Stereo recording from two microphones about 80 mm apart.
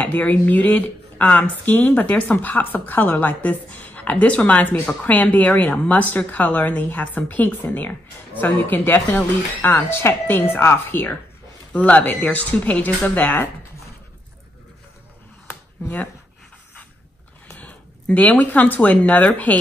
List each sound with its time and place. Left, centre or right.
0.0 s speech: centre
15.4 s a sound: centre
17.5 s speech: centre